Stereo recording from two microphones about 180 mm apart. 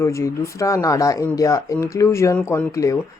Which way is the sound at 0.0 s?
15° left (ahead or behind).